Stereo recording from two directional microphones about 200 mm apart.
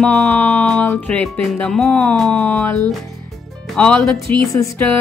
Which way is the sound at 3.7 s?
5° left (ahead or behind).